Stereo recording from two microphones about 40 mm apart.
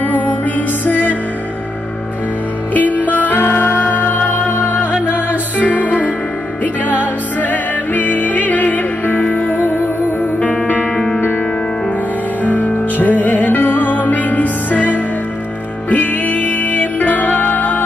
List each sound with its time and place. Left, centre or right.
0.0 s music: left
2.7 s music: left
3.3 s music: left
5.6 s music: left
12.4 s music: left